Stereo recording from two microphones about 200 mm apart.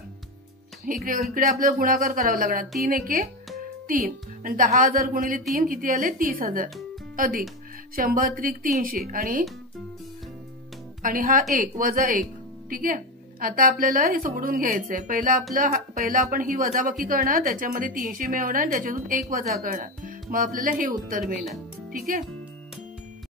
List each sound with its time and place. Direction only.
0.8 s speech: 45° right (ahead or behind)
11.0 s speech: 45° right (ahead or behind)